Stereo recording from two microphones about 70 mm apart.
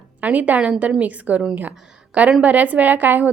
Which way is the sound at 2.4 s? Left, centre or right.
Right.